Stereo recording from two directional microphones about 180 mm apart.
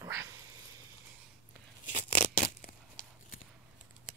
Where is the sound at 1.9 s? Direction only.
45° left (ahead or behind).